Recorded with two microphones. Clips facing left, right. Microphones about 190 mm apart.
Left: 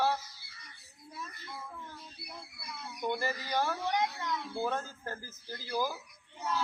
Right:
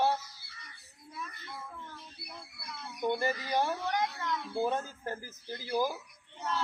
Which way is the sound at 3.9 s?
20° left (ahead or behind).